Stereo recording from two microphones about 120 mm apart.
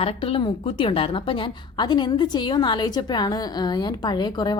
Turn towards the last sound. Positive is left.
turn(degrees=35)  # may be behind; listen again after turning